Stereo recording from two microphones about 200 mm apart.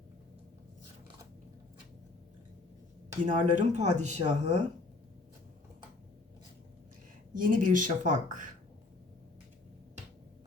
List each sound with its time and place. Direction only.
3.2 s speech: 35° right (ahead or behind)
7.3 s speech: 40° right (ahead or behind)